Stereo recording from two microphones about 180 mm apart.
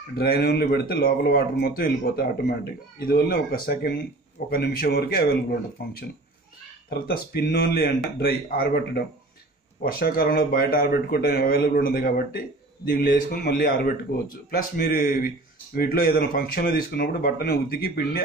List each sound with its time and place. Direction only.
0.1 s a man's voice: 60° left (ahead or behind)